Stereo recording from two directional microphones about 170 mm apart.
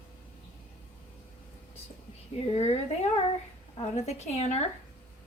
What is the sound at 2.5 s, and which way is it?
A woman's voice, 35° left (ahead or behind).